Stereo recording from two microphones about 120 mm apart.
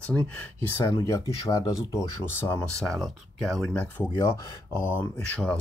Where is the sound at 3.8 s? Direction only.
20° left (ahead or behind).